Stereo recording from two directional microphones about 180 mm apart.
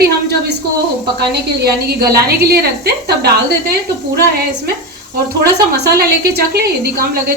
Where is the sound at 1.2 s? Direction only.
60° right (ahead or behind).